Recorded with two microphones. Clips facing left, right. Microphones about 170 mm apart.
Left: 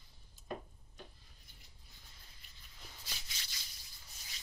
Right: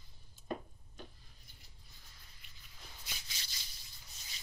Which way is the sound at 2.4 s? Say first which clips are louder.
Right 1 dB; 35° left (ahead or behind).